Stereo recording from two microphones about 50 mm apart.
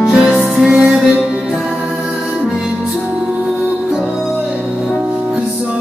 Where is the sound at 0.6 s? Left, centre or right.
Right.